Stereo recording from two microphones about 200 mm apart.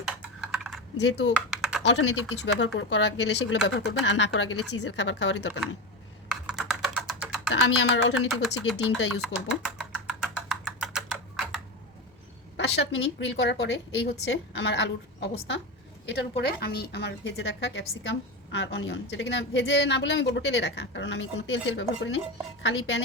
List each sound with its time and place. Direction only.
0.4 s computer keyboard: centre (ahead or behind)
0.9 s a woman's voice: 60° left (ahead or behind)
1.3 s typing: 5° right (ahead or behind)
2.4 s a woman's voice: 70° left (ahead or behind)
6.5 s typing: centre (ahead or behind)
7.5 s a woman's voice: 75° left (ahead or behind)
8.7 s a woman's voice: 60° left (ahead or behind)
9.2 s typing: 5° right (ahead or behind)
12.5 s a woman's voice: 60° left (ahead or behind)